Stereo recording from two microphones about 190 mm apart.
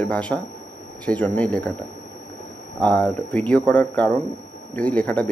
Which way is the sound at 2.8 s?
5° left (ahead or behind).